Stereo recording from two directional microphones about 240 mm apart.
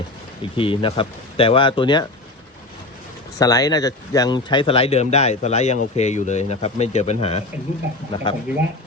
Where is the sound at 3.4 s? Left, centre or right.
Centre.